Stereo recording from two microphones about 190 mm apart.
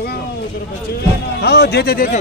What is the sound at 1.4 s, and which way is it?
Speech, 60° left (ahead or behind).